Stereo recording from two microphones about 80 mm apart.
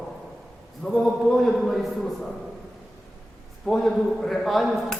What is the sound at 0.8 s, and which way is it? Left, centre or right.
A man's voice, centre.